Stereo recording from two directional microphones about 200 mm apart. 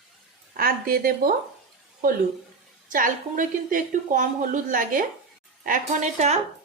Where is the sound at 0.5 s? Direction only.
45° right (ahead or behind).